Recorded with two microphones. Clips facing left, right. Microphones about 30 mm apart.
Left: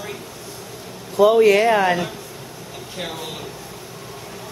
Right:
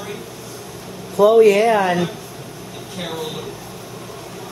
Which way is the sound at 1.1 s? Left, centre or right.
Centre.